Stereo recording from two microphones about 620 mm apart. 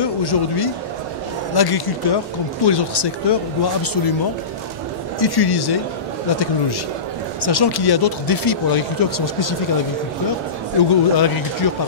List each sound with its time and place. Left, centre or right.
0.0 s speech: left
5.2 s speech: left
7.4 s speech: left
10.8 s speech: left